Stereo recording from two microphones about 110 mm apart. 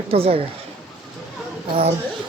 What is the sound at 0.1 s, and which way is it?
Speech, 60° right (ahead or behind).